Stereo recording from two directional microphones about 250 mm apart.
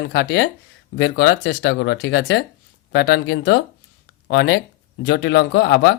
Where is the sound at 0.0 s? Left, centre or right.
Left.